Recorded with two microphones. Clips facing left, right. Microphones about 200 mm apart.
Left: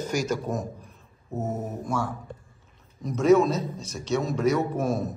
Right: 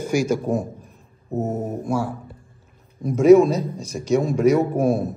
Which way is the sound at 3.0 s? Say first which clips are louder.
Right 7 dB; 10° right (ahead or behind).